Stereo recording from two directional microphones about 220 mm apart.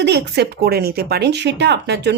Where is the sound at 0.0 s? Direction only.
50° right (ahead or behind).